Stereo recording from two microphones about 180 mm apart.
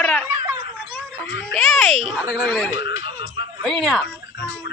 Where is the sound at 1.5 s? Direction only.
Centre (ahead or behind).